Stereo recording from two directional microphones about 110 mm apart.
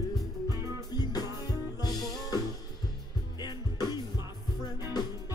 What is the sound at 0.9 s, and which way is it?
Music, 35° left (ahead or behind).